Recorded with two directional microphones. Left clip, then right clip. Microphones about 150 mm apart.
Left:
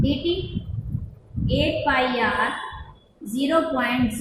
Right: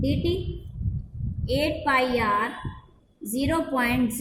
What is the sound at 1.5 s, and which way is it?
Speech, 30° right (ahead or behind).